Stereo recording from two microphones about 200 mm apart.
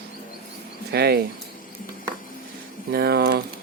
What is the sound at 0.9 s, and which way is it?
Speech, 50° right (ahead or behind).